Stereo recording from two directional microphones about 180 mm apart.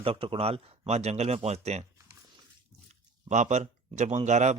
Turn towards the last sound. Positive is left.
turn(degrees=-40)  # may be behind; listen again after turning